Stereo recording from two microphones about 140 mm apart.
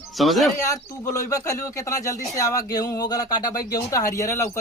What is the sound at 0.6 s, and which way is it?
Speech, 25° left (ahead or behind).